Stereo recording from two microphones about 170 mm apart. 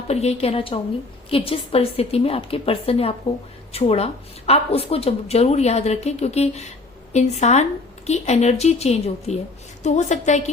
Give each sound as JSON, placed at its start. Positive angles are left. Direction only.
{"t": 0.1, "sound": "a woman's voice", "side_deg": 40}